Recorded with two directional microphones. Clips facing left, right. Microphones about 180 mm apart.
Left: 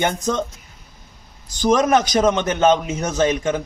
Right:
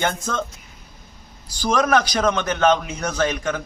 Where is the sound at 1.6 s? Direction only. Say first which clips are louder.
Left 3 dB; 20° left (ahead or behind).